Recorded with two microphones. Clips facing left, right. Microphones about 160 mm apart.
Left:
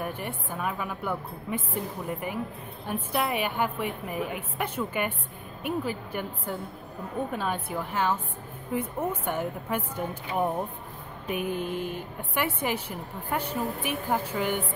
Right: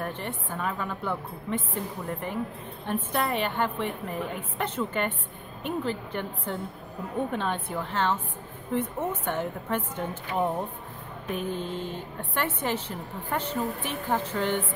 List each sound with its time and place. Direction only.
0.0 s a woman's voice: 10° left (ahead or behind)